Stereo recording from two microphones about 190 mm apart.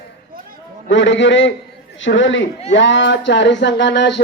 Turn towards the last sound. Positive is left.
turn(degrees=65)  # may be behind; listen again after turning